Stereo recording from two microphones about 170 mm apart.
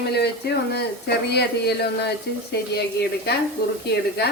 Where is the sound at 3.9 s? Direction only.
75° left (ahead or behind).